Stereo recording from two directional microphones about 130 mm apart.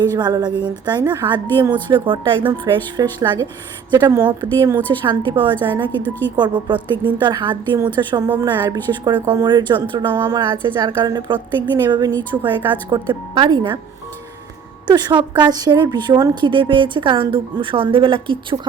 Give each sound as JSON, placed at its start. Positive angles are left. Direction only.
{"t": 0.0, "sound": "a woman's voice", "side_deg": -30}
{"t": 14.8, "sound": "a woman's voice", "side_deg": -35}